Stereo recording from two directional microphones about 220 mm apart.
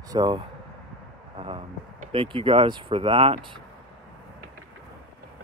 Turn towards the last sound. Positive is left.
turn(degrees=-25)  # may be behind; listen again after turning